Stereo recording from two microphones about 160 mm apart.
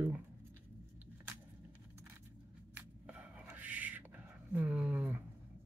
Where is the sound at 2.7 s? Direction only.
10° right (ahead or behind).